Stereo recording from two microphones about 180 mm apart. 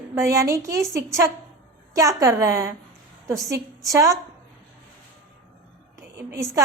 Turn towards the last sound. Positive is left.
turn(degrees=-15)  # may be behind; listen again after turning